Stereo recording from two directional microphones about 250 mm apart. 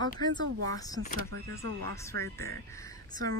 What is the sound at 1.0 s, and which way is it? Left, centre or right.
Speech, left.